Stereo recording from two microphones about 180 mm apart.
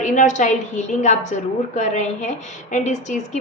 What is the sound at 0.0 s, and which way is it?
A woman's voice, 45° left (ahead or behind).